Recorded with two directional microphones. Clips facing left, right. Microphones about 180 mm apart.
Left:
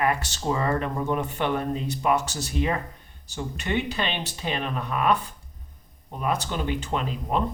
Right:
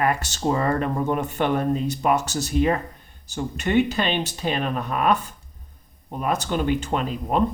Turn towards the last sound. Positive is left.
turn(degrees=-50)  # may be behind; listen again after turning